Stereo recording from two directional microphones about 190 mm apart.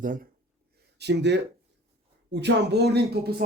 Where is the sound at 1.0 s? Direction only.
60° right (ahead or behind).